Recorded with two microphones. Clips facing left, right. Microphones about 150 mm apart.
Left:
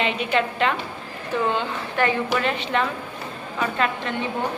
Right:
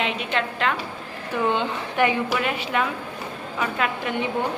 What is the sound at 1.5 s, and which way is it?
A woman's voice, 15° right (ahead or behind).